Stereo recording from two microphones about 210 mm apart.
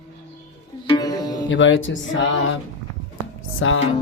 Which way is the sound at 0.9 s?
20° left (ahead or behind).